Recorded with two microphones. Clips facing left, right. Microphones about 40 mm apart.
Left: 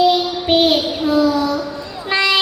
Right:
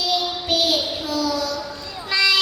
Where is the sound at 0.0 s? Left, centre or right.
Left.